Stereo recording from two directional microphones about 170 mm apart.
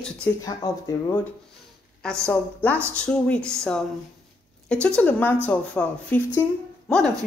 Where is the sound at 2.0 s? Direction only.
5° left (ahead or behind).